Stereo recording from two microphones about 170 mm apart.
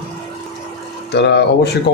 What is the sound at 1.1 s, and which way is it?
Speech, 80° left.